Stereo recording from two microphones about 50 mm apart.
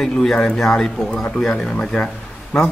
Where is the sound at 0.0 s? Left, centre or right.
Centre.